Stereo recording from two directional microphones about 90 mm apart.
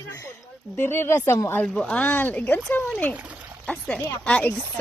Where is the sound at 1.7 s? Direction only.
10° left (ahead or behind).